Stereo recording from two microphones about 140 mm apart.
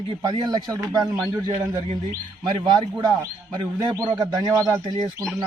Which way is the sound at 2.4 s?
35° right (ahead or behind).